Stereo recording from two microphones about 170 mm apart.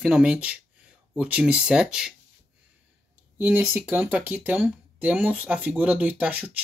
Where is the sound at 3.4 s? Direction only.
10° right (ahead or behind).